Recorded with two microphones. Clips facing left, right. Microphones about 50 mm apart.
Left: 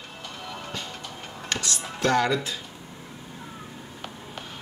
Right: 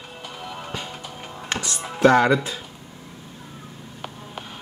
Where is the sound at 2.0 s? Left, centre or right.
Centre.